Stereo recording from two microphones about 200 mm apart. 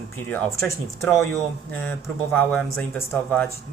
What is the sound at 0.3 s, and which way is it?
A man's voice, 10° left (ahead or behind).